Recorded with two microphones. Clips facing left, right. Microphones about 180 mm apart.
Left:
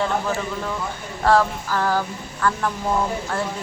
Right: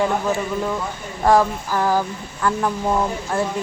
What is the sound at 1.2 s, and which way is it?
Speech, 15° right (ahead or behind).